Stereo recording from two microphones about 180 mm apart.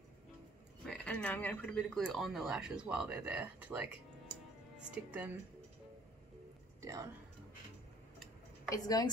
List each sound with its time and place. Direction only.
0.8 s speech: 5° left (ahead or behind)
6.8 s speech: 15° right (ahead or behind)
8.6 s speech: 20° left (ahead or behind)